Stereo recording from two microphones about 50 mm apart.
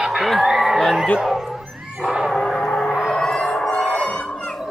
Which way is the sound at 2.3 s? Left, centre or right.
Centre.